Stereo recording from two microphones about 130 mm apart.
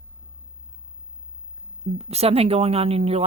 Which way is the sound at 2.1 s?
50° right (ahead or behind).